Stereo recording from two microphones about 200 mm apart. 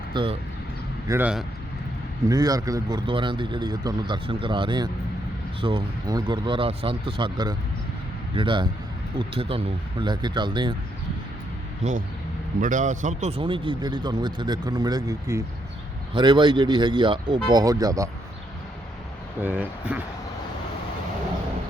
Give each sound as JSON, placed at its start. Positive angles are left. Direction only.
{"t": 0.1, "sound": "speech", "side_deg": -25}
{"t": 1.0, "sound": "speech", "side_deg": -10}
{"t": 2.3, "sound": "speech", "side_deg": -20}
{"t": 11.8, "sound": "speech", "side_deg": -35}
{"t": 19.4, "sound": "speech", "side_deg": -10}